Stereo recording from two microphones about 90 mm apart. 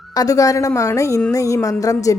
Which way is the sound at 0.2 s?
40° left (ahead or behind).